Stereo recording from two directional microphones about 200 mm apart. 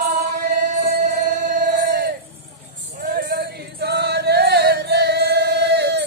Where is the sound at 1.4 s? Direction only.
40° right (ahead or behind).